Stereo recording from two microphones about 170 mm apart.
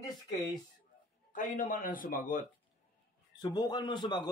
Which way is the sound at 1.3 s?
50° left (ahead or behind).